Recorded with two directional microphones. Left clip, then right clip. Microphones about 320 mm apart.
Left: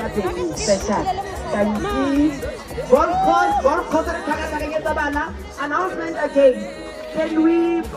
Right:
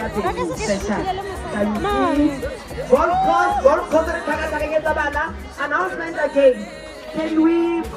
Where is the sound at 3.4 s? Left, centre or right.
Left.